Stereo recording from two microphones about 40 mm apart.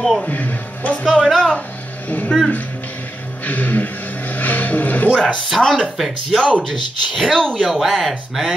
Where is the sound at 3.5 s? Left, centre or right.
Left.